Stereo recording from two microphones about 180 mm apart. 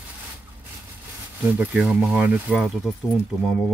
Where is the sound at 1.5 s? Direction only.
5° right (ahead or behind).